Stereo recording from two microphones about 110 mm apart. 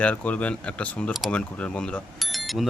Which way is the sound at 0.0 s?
10° left (ahead or behind).